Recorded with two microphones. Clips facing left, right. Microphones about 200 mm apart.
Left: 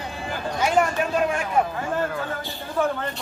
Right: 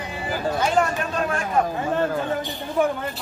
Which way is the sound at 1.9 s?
20° right (ahead or behind).